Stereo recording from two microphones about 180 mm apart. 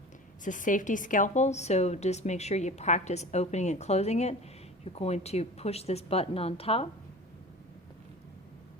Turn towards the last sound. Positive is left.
turn(degrees=35)  # may be behind; listen again after turning